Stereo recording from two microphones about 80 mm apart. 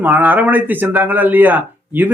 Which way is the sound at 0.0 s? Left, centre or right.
Right.